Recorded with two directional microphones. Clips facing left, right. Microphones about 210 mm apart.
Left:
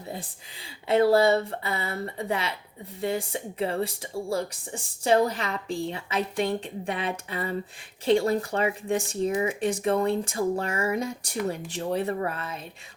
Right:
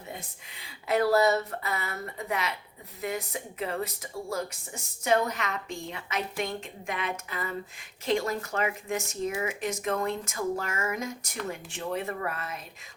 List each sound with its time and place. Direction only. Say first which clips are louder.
0.1 s speech: left 5 dB; 30° left (ahead or behind)